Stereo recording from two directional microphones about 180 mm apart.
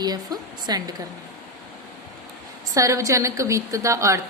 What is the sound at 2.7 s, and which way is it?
A woman's voice, 15° right (ahead or behind).